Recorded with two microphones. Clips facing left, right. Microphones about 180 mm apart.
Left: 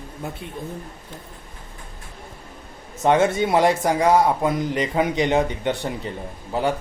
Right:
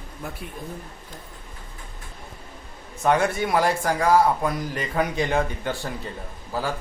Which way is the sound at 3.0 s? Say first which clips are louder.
Left 3 dB; 20° left (ahead or behind).